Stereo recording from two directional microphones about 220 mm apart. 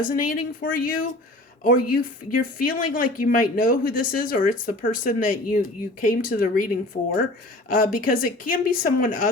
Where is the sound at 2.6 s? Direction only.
40° left (ahead or behind).